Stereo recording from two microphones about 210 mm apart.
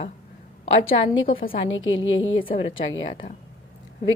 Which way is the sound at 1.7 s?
65° left (ahead or behind).